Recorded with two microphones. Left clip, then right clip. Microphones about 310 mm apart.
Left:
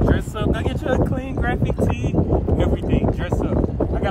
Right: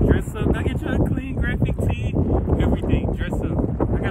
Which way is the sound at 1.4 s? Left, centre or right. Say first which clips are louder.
Left 5 dB; centre.